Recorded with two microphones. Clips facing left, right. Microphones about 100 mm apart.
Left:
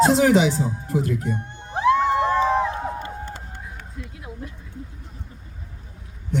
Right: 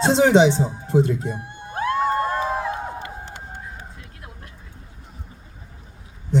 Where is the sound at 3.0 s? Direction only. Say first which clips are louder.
Left 2 dB; 40° left (ahead or behind).